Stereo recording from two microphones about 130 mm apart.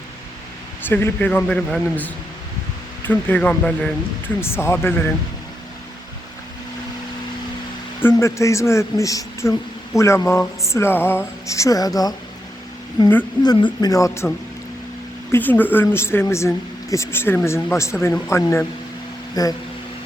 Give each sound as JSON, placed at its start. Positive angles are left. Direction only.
{"t": 0.9, "sound": "speech", "side_deg": 15}
{"t": 4.4, "sound": "speech", "side_deg": 20}
{"t": 8.1, "sound": "speech", "side_deg": 25}
{"t": 13.4, "sound": "speech", "side_deg": 35}
{"t": 15.3, "sound": "speech", "side_deg": 15}